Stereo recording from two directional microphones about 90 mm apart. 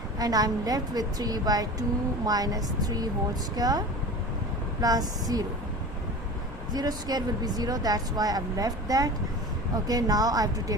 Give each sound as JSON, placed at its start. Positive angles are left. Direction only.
{"t": 0.2, "sound": "speech", "side_deg": -45}
{"t": 6.7, "sound": "speech", "side_deg": -50}